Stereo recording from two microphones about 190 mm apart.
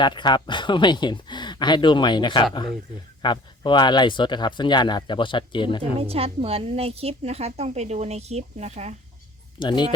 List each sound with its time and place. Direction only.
0.0 s speech: 25° left (ahead or behind)
6.0 s a woman's voice: 30° right (ahead or behind)
9.6 s speech: 25° left (ahead or behind)